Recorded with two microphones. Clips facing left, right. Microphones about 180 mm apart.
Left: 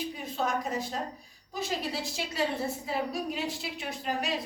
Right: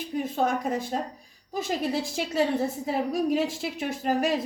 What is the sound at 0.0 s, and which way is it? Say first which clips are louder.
Speech: right 6 dB; 50° right (ahead or behind).